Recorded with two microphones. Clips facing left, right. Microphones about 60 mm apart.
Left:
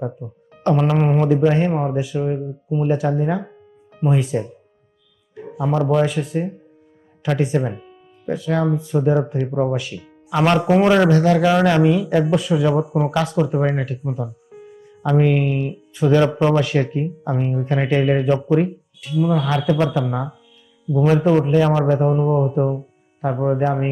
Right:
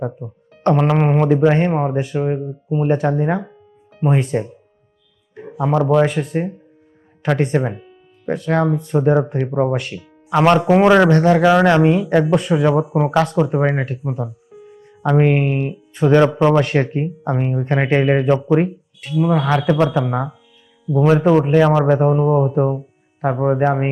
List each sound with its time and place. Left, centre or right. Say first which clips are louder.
0.2 s speech: right 4 dB; right
5.5 s speech: right 3 dB; right